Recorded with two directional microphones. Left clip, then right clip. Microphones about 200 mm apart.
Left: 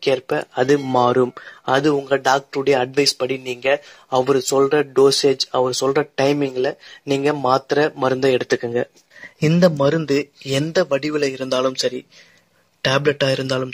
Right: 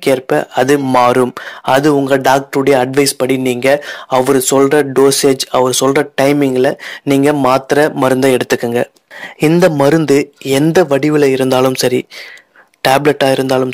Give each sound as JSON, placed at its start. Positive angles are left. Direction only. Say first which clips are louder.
{"t": 0.0, "sound": "speech", "louder": "right 7 dB", "side_deg": -35}